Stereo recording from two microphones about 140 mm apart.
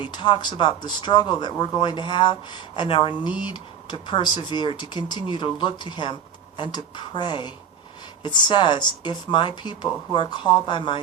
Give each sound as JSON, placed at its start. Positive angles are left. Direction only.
{"t": 0.0, "sound": "speech", "side_deg": 35}